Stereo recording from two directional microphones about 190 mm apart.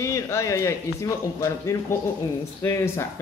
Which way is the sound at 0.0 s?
15° left (ahead or behind).